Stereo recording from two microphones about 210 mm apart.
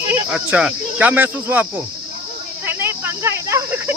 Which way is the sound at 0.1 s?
10° right (ahead or behind).